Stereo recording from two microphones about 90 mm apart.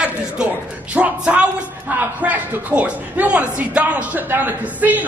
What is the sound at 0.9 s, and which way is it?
A man's voice, 15° right (ahead or behind).